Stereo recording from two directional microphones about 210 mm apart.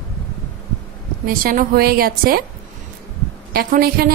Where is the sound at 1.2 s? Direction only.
40° right (ahead or behind).